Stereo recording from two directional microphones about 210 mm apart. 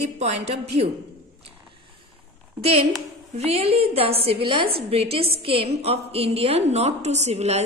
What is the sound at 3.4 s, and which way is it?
A woman's voice, 30° right (ahead or behind).